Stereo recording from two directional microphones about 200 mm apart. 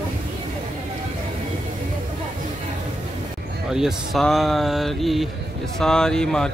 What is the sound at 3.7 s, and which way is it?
Speech, centre (ahead or behind).